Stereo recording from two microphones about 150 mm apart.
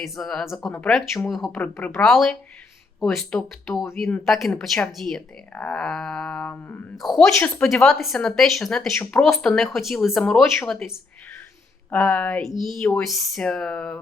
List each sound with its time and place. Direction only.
0.0 s speech: 5° left (ahead or behind)
2.0 s speech: centre (ahead or behind)
6.9 s speech: centre (ahead or behind)